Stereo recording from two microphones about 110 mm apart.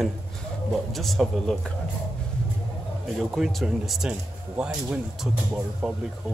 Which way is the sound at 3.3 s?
Centre (ahead or behind).